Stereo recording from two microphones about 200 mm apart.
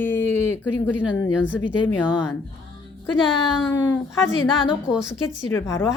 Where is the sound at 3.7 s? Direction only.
10° left (ahead or behind).